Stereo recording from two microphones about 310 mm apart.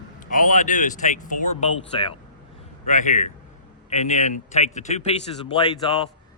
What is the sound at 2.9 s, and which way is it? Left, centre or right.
A man's voice, left.